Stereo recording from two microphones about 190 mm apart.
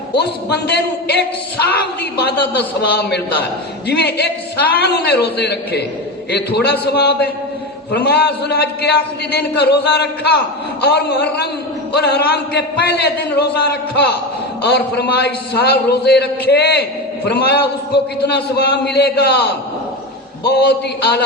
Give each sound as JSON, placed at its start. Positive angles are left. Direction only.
{"t": 0.1, "sound": "a man's voice", "side_deg": 60}